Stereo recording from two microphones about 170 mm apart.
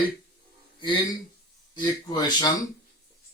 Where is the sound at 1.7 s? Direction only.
25° left (ahead or behind).